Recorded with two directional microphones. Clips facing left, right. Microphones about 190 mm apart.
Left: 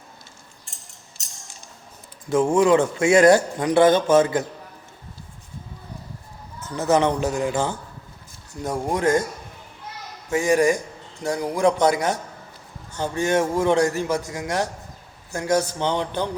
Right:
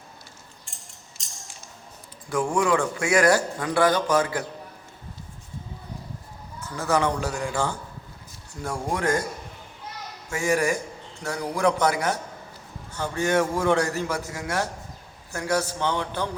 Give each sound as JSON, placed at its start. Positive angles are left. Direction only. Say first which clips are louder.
{"t": 2.2, "sound": "a man's voice", "louder": "left 6 dB", "side_deg": 25}
{"t": 6.7, "sound": "a man's voice", "louder": "left 4 dB", "side_deg": 20}
{"t": 10.2, "sound": "a man's voice", "louder": "left 5 dB", "side_deg": 15}